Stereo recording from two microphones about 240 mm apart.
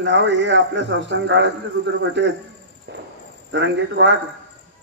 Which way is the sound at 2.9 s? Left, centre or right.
Right.